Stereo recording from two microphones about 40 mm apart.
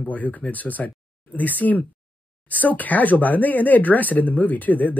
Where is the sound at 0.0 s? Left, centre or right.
Left.